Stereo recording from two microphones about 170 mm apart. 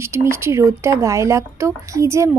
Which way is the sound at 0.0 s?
15° right (ahead or behind).